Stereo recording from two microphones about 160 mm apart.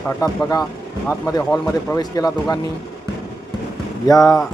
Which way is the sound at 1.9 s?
25° left (ahead or behind).